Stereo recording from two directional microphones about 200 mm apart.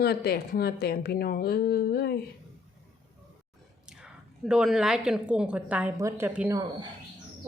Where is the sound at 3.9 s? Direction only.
5° right (ahead or behind).